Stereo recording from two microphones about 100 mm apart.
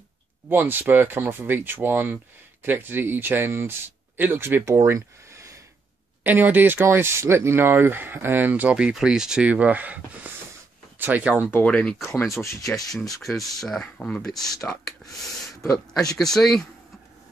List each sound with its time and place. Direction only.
0.5 s speech: 20° right (ahead or behind)
6.2 s speech: 20° right (ahead or behind)
11.5 s speech: 10° left (ahead or behind)
12.1 s speech: 30° left (ahead or behind)
13.1 s speech: centre (ahead or behind)
15.6 s speech: 5° left (ahead or behind)